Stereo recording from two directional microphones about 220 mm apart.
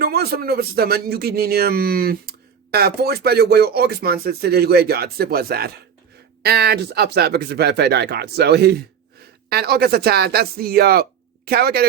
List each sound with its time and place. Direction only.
0.0 s speech: 45° right (ahead or behind)